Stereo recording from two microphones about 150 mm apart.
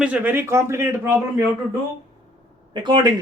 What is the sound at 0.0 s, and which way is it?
Speech, 10° right (ahead or behind).